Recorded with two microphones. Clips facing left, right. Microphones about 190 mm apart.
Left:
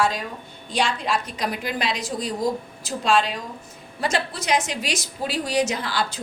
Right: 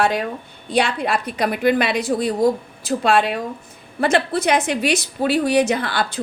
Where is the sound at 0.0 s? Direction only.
60° right (ahead or behind).